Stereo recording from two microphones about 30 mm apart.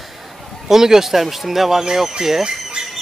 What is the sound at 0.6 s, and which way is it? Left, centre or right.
Speech, centre.